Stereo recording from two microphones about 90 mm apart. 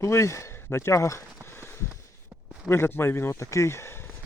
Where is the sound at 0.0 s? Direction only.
30° left (ahead or behind).